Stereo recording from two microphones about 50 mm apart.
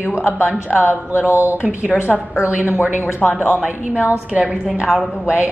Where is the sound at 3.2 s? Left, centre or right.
Centre.